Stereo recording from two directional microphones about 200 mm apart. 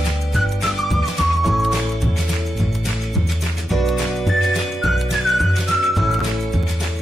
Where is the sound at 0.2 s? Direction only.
Centre (ahead or behind).